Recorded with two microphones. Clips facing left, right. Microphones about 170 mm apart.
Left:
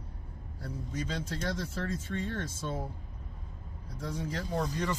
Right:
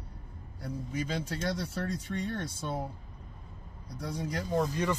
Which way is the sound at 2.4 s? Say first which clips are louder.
Right 1 dB; 15° right (ahead or behind).